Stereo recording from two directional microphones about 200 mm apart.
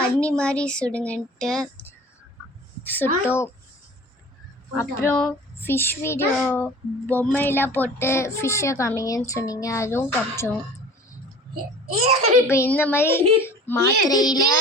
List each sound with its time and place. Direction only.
0.0 s speech: 5° left (ahead or behind)
2.8 s a child's voice: 10° left (ahead or behind)
4.8 s a child's voice: 10° left (ahead or behind)
11.9 s a child's voice: 30° right (ahead or behind)
12.5 s a child's voice: 10° left (ahead or behind)